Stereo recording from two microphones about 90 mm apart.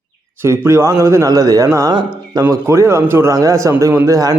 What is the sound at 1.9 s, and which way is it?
Speech, 60° right (ahead or behind).